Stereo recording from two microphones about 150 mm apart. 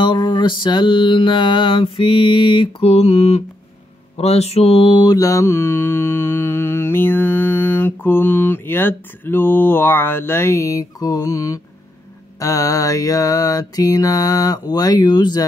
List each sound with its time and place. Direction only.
0.0 s mantra: 30° left (ahead or behind)